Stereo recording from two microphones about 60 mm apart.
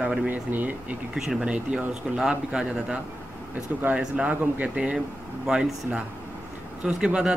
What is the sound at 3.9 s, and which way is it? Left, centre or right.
Speech, right.